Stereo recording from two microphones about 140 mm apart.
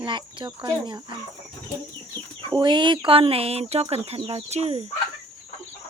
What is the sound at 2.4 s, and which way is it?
Speech, 35° right (ahead or behind).